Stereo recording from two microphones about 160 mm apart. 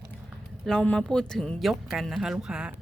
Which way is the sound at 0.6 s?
5° left (ahead or behind).